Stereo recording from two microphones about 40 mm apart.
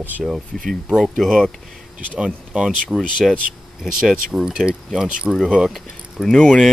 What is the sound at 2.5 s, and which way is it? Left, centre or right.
Speech, right.